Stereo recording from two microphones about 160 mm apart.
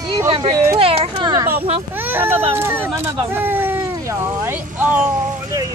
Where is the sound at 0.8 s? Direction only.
35° right (ahead or behind).